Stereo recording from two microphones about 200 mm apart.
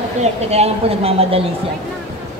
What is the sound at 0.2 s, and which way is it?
Speech, 30° right (ahead or behind).